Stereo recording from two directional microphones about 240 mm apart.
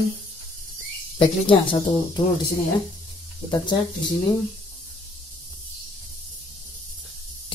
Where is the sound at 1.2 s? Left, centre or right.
Left.